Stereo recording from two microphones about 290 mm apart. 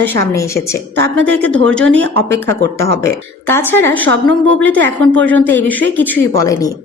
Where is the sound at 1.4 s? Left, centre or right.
Right.